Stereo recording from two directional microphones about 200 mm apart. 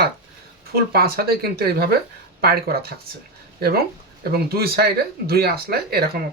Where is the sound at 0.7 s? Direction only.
50° right (ahead or behind).